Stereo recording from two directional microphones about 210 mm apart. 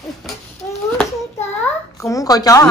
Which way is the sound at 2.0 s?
15° left (ahead or behind).